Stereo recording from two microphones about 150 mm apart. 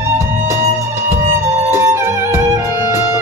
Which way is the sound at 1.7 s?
20° right (ahead or behind).